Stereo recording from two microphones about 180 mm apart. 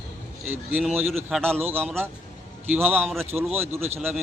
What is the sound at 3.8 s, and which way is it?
Speech, 35° right (ahead or behind).